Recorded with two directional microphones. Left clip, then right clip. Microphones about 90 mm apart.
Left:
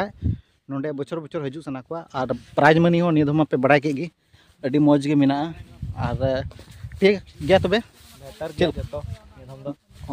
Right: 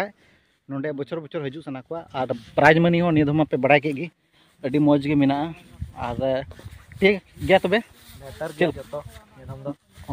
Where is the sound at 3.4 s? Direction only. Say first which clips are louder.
Even; 70° left (ahead or behind).